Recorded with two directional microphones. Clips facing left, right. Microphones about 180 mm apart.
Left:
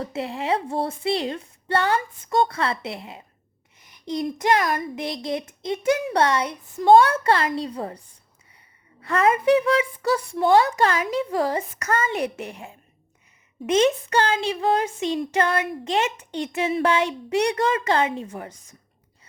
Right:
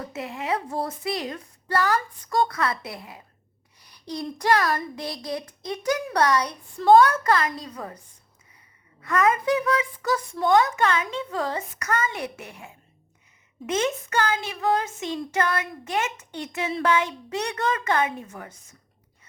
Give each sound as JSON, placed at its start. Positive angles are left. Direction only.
{"t": 0.0, "sound": "speech", "side_deg": 30}
{"t": 12.1, "sound": "speech", "side_deg": 20}
{"t": 13.7, "sound": "speech", "side_deg": 25}